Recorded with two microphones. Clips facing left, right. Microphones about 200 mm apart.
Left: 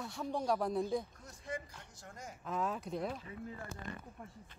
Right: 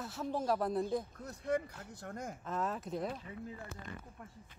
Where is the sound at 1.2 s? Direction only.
60° right (ahead or behind).